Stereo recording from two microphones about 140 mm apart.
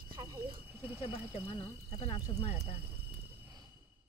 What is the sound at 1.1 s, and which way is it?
Speech, 45° left (ahead or behind).